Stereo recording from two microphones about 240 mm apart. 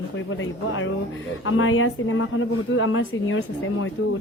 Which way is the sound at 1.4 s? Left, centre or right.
Left.